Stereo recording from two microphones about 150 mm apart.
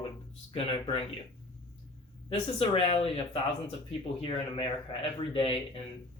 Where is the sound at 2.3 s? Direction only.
40° left (ahead or behind).